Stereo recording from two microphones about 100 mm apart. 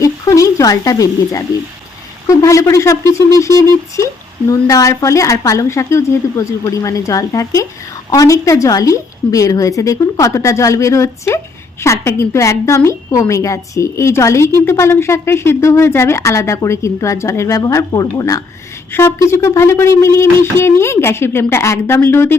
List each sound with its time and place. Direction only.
0.0 s a sound: 35° left (ahead or behind)
2.2 s a woman's voice: 30° left (ahead or behind)
18.9 s a woman's voice: 25° left (ahead or behind)